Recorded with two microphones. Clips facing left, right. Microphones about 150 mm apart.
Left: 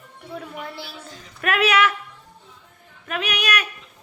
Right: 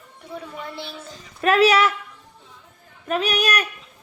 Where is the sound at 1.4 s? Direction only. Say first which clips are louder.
Right 3 dB; 30° right (ahead or behind).